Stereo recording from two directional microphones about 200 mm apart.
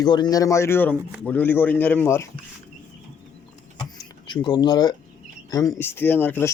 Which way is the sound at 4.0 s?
20° left (ahead or behind).